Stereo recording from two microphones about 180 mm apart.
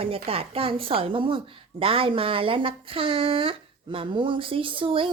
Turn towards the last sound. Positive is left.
turn(degrees=-30)  # may be behind; listen again after turning